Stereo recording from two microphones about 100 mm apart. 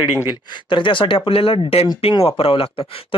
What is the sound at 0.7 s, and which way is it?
Speech, 55° left (ahead or behind).